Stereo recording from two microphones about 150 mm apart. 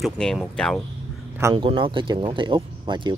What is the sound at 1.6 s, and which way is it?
Speech, 35° right (ahead or behind).